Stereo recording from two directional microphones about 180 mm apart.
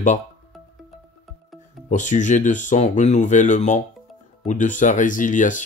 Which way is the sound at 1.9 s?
45° left (ahead or behind).